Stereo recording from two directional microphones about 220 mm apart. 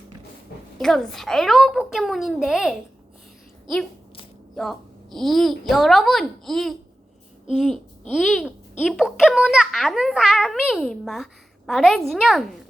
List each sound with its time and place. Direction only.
0.8 s a child's voice: centre (ahead or behind)
4.5 s a child's voice: centre (ahead or behind)